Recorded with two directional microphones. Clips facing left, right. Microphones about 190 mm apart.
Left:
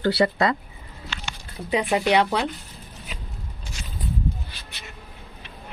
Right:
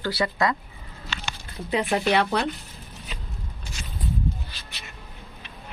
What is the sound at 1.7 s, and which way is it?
Speech, 15° left (ahead or behind).